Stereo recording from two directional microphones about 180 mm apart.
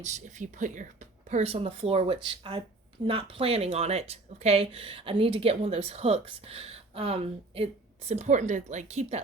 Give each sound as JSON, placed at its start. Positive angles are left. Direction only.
{"t": 0.0, "sound": "speech", "side_deg": -40}